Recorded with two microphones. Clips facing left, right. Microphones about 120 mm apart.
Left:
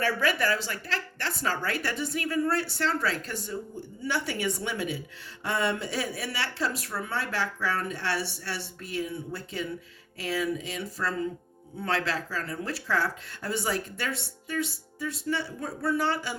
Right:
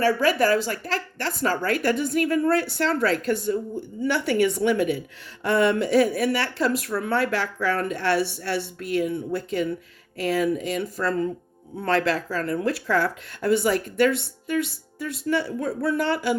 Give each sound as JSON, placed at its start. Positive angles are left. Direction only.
{"t": 0.0, "sound": "speech", "side_deg": -40}